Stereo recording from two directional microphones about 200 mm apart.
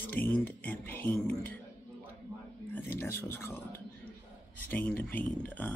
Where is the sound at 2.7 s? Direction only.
10° left (ahead or behind).